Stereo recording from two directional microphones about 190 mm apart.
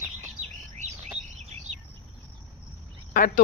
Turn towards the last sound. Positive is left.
turn(degrees=45)  # may be behind; listen again after turning